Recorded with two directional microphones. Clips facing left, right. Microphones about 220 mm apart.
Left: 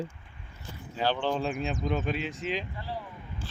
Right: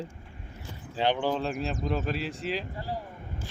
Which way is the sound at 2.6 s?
40° right (ahead or behind).